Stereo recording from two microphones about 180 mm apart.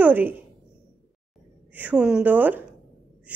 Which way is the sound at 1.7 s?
10° right (ahead or behind).